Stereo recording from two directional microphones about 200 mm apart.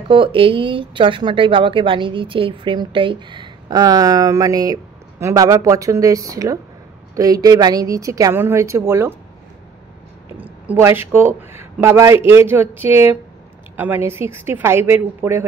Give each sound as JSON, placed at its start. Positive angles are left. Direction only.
{"t": 0.1, "sound": "a woman's voice", "side_deg": -25}
{"t": 10.7, "sound": "a woman's voice", "side_deg": -10}